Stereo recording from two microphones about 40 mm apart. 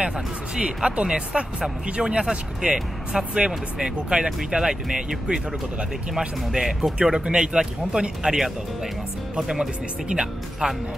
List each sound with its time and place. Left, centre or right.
0.8 s speech: right
9.6 s speech: right